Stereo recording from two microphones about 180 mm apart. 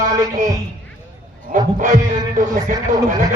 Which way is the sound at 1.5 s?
45° right (ahead or behind).